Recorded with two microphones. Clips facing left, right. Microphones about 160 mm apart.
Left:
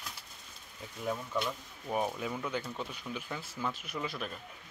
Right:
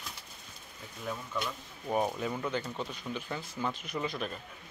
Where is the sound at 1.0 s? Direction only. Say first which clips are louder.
Left 3 dB; 15° left (ahead or behind).